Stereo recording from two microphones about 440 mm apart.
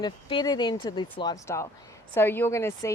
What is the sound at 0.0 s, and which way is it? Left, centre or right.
Speech, centre.